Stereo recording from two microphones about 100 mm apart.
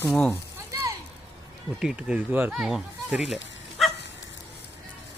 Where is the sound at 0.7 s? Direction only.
35° right (ahead or behind).